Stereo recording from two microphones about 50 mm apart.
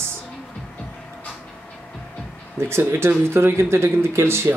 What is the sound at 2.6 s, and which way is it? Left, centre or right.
Speech, right.